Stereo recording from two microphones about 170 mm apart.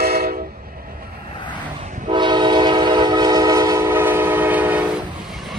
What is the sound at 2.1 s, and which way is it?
Train, 25° right (ahead or behind).